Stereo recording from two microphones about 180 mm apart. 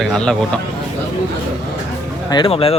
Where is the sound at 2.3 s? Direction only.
30° left (ahead or behind).